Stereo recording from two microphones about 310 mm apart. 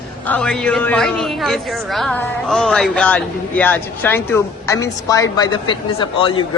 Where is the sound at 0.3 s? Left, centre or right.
Centre.